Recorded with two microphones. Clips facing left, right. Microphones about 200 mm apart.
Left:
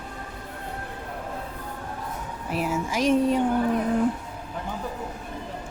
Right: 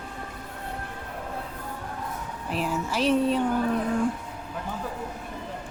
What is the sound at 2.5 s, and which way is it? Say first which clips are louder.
Speech: left 2 dB; 10° left (ahead or behind).